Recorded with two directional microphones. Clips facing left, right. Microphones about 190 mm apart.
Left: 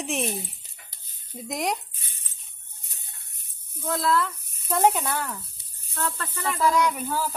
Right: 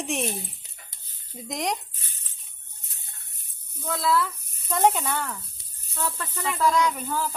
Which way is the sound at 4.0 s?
5° right (ahead or behind).